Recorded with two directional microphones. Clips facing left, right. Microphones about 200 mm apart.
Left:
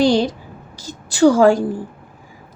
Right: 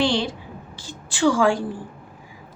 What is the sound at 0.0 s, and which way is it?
Speech, 40° left (ahead or behind).